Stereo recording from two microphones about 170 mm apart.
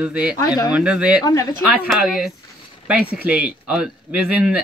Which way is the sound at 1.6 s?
10° right (ahead or behind).